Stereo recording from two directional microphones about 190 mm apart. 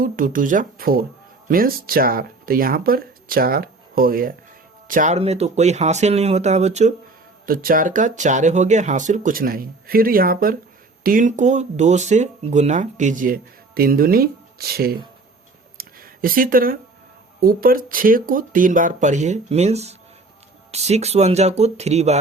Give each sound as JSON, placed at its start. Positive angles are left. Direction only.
{"t": 0.0, "sound": "speech", "side_deg": -45}
{"t": 7.4, "sound": "speech", "side_deg": -50}
{"t": 15.8, "sound": "a sound", "side_deg": -50}
{"t": 17.4, "sound": "speech", "side_deg": -50}